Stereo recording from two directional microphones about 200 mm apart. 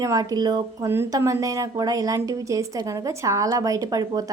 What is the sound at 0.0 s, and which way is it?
Speech, 15° right (ahead or behind).